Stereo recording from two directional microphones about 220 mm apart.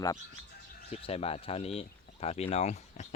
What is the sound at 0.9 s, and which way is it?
Speech, 25° left (ahead or behind).